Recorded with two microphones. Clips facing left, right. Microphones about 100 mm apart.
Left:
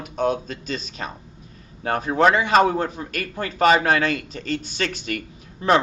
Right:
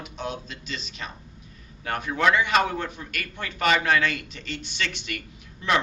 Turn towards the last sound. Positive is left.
turn(degrees=40)  # may be behind; listen again after turning